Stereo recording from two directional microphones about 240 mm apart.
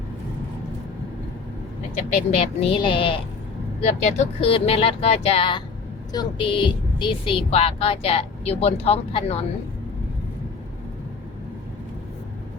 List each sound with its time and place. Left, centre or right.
2.1 s speech: left